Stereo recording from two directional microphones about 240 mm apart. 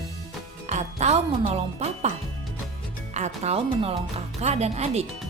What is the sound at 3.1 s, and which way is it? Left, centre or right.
Speech, right.